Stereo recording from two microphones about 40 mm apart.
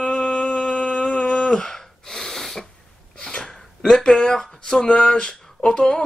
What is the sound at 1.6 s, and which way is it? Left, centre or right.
Gasp, centre.